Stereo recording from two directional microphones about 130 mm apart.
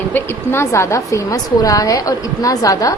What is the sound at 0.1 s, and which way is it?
A woman's voice, 20° left (ahead or behind).